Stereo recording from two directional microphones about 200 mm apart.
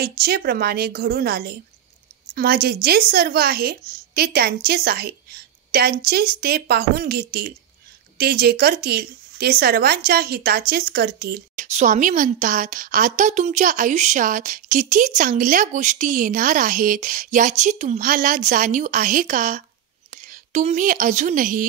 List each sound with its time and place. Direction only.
0.2 s speech: 50° right (ahead or behind)
11.6 s a woman's voice: 35° right (ahead or behind)